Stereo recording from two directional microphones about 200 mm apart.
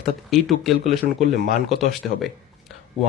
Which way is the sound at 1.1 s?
40° right (ahead or behind).